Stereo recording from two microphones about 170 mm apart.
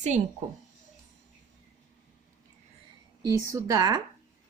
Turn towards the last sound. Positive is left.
turn(degrees=-20)  # may be behind; listen again after turning